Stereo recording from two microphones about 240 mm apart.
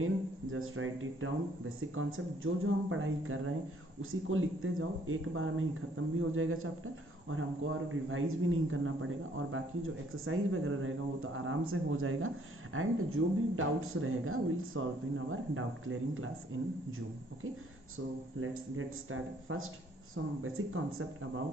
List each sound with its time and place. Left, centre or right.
0.0 s speech: right
17.9 s speech: right